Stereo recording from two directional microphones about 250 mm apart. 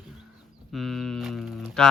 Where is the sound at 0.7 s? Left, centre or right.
Centre.